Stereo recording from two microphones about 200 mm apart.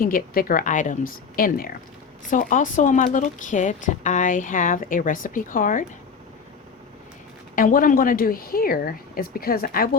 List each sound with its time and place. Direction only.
0.0 s speech: 45° left (ahead or behind)
7.5 s speech: 45° left (ahead or behind)